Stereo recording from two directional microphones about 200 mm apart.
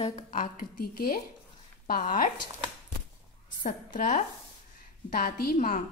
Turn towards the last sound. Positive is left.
turn(degrees=40)  # may be behind; listen again after turning